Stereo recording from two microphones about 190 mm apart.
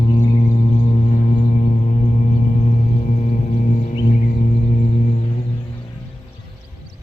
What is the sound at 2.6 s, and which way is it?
Gong, 35° left (ahead or behind).